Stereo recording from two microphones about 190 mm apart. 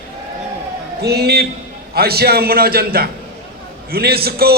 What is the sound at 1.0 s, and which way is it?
A man's voice, 60° right (ahead or behind).